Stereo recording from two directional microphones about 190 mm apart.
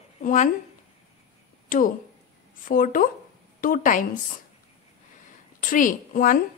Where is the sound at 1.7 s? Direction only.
45° left (ahead or behind).